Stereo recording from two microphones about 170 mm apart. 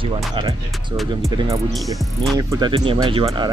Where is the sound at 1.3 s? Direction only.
25° right (ahead or behind).